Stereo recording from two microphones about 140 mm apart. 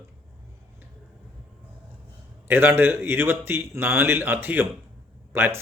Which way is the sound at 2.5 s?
15° right (ahead or behind).